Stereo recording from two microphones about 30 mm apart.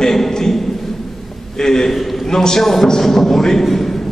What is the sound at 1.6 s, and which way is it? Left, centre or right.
Speech, centre.